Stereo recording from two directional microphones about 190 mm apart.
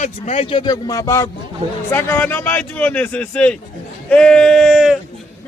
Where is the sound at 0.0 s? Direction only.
35° left (ahead or behind).